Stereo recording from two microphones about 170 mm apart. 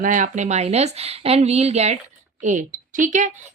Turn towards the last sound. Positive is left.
turn(degrees=-45)  # may be behind; listen again after turning